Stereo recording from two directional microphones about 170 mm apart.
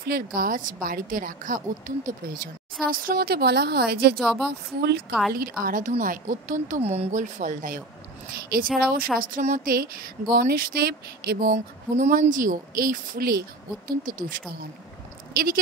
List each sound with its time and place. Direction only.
0.0 s speech: 60° right (ahead or behind)
4.2 s speech: centre (ahead or behind)
4.5 s speech: 75° right (ahead or behind)
5.3 s speech: 60° right (ahead or behind)
6.8 s speech: 35° right (ahead or behind); by 9.1 s 60° right (ahead or behind)
9.2 s speech: 50° right (ahead or behind)
10.3 s speech: 60° right (ahead or behind)